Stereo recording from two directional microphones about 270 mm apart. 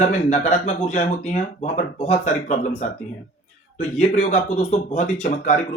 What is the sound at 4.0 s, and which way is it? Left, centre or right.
Speech, left.